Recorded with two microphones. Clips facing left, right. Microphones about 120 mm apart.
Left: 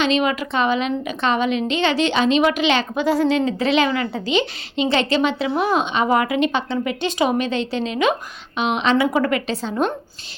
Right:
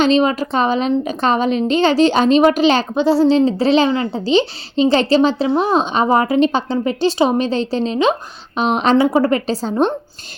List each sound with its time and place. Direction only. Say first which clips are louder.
0.0 s a woman's voice: right 5 dB; 35° right (ahead or behind)